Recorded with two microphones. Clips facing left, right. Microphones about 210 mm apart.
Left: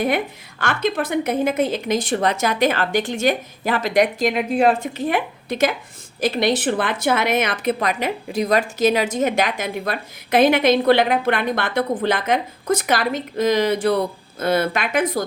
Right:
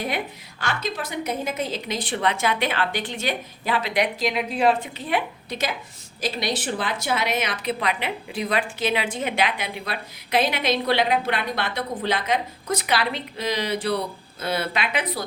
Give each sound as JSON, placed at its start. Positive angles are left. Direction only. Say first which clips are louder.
{"t": 0.6, "sound": "speech", "louder": "left 7 dB", "side_deg": 55}